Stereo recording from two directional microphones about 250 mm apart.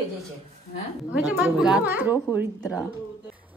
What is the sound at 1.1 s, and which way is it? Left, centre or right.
A woman's voice, centre.